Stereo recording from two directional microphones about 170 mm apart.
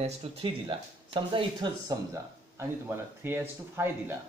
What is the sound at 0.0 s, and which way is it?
Speech, 40° right (ahead or behind).